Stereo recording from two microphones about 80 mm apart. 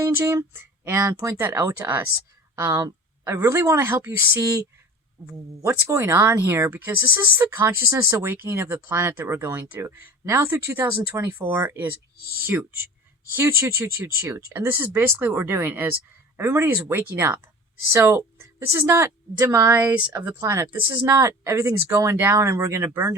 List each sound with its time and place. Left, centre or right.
0.0 s a woman's voice: right